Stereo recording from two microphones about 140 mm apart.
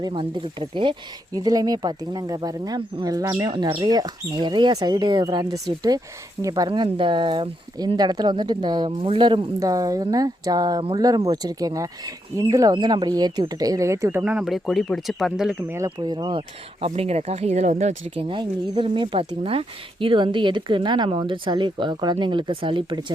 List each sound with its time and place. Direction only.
0.0 s a woman's voice: 35° right (ahead or behind); by 15.5 s 5° right (ahead or behind)
16.0 s a woman's voice: 30° right (ahead or behind)
16.8 s speech: 50° right (ahead or behind)
18.1 s a woman's voice: 40° right (ahead or behind)